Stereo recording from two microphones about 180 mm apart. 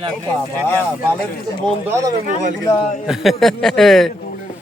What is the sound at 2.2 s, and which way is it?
Speech, 45° right (ahead or behind).